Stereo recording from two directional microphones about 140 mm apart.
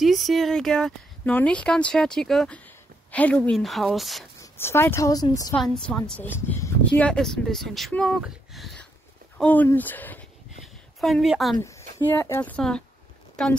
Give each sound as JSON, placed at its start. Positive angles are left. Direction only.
{"t": 0.0, "sound": "speech", "side_deg": 0}
{"t": 4.4, "sound": "a woman's voice", "side_deg": 15}
{"t": 5.5, "sound": "a woman's voice", "side_deg": 10}
{"t": 9.4, "sound": "a woman's voice", "side_deg": 10}
{"t": 10.6, "sound": "a sound", "side_deg": 0}
{"t": 12.2, "sound": "a woman's voice", "side_deg": 15}